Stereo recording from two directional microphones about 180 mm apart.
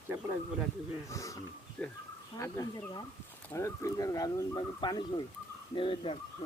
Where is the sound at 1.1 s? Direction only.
20° left (ahead or behind).